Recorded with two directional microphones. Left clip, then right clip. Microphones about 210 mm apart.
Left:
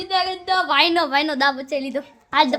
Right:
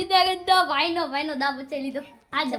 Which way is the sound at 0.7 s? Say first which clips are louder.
Left 7 dB; 55° left (ahead or behind).